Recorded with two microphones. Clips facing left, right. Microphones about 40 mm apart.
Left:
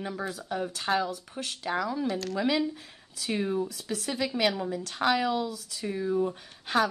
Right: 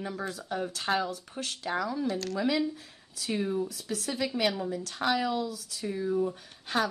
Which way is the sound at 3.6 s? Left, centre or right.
Left.